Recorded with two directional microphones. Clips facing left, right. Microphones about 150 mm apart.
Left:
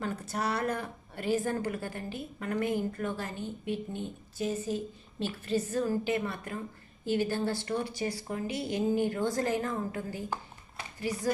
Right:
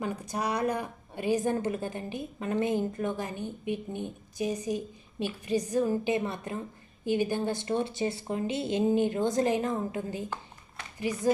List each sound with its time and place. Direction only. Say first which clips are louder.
0.0 s a woman's voice: right 1 dB; 15° right (ahead or behind)